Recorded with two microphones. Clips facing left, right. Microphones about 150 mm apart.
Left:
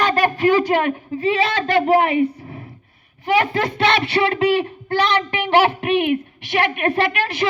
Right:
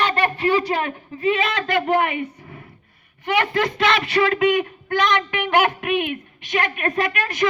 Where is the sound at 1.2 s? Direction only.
35° left (ahead or behind).